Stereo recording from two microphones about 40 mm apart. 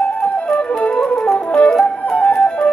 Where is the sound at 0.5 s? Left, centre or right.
Centre.